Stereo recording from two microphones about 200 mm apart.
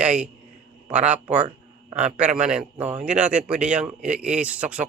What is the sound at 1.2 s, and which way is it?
Speech, 35° right (ahead or behind).